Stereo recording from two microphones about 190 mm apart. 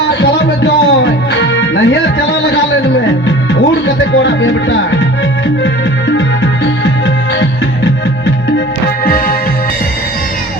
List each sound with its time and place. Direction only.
0.1 s music: 70° left (ahead or behind)
6.1 s music: 90° left
9.0 s music: 50° left (ahead or behind)